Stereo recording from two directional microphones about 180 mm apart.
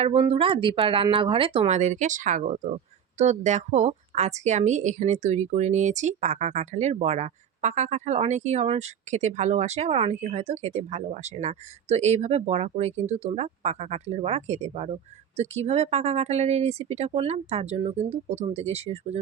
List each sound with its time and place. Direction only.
0.0 s a woman's voice: 30° right (ahead or behind)